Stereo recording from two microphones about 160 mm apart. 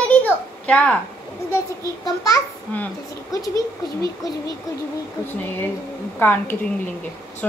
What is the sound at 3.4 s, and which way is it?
Speech, 20° left (ahead or behind).